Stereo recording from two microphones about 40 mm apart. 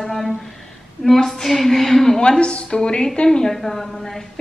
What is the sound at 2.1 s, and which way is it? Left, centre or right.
Speech, left.